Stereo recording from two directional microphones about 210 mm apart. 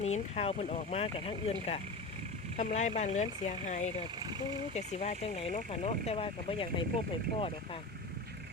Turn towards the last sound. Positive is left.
turn(degrees=25)  # may be behind; listen again after turning